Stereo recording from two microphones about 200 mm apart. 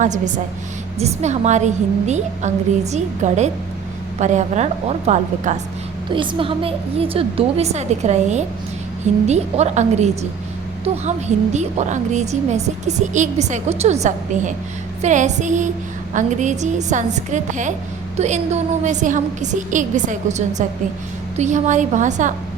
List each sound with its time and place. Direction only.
0.0 s a woman's voice: 40° right (ahead or behind)
11.5 s a woman's voice: 35° right (ahead or behind)